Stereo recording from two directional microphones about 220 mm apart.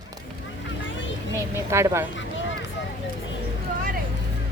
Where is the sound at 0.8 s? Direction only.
55° left (ahead or behind).